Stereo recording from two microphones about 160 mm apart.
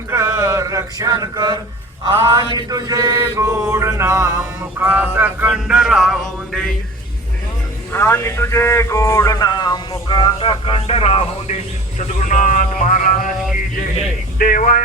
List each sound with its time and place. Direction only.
0.1 s a sound: 15° right (ahead or behind)
2.3 s mantra: 30° right (ahead or behind); by 6.7 s centre (ahead or behind)
7.9 s speech: 15° left (ahead or behind); by 14.8 s 60° left (ahead or behind)